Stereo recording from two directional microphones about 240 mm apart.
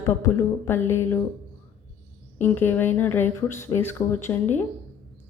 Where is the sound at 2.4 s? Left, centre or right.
Centre.